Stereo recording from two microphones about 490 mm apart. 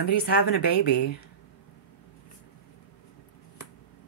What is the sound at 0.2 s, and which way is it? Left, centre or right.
Speech, centre.